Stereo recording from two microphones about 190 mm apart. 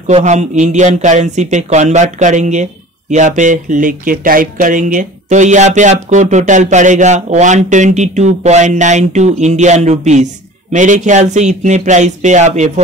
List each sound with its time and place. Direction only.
0.0 s speech: 40° right (ahead or behind)